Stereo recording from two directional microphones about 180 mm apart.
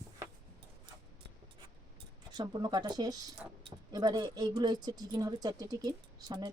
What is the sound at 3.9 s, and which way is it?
Speech, 20° right (ahead or behind).